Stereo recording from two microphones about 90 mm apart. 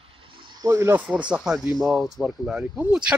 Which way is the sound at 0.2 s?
65° right (ahead or behind).